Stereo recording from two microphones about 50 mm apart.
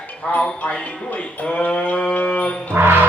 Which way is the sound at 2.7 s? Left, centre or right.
Right.